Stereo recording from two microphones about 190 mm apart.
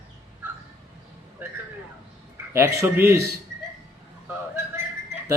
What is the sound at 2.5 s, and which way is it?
Speech, 15° right (ahead or behind).